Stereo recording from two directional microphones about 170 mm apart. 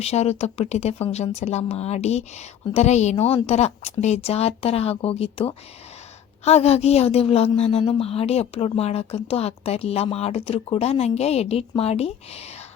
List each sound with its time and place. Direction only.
0.0 s a woman's voice: 40° left (ahead or behind)